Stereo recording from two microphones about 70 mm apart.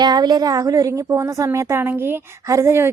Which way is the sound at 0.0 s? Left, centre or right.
Right.